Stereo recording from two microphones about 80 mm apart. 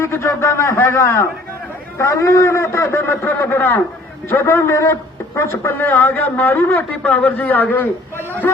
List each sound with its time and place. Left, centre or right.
0.0 s a man's voice: left
7.0 s speech: centre
7.4 s a man's voice: left